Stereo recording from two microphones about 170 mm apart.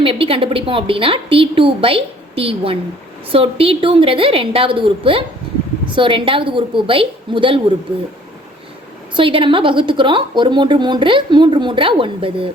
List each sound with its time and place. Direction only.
0.0 s a woman's voice: 30° right (ahead or behind)
9.1 s a woman's voice: 30° right (ahead or behind)